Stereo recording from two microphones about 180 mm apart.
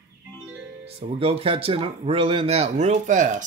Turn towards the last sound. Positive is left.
turn(degrees=-45)  # may be behind; listen again after turning